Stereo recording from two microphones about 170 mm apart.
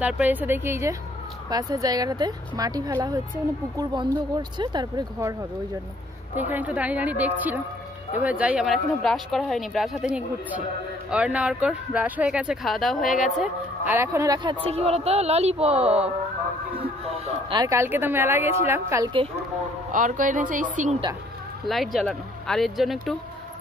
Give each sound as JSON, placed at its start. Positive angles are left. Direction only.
{"t": 0.0, "sound": "speech", "side_deg": -10}
{"t": 6.3, "sound": "a woman's voice", "side_deg": -10}
{"t": 13.9, "sound": "speech", "side_deg": -15}
{"t": 17.1, "sound": "a sound", "side_deg": -40}
{"t": 17.6, "sound": "speech", "side_deg": -15}
{"t": 19.9, "sound": "speech", "side_deg": -50}
{"t": 21.6, "sound": "speech", "side_deg": 0}